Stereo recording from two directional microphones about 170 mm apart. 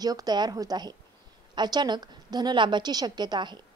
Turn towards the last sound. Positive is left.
turn(degrees=-25)  # may be behind; listen again after turning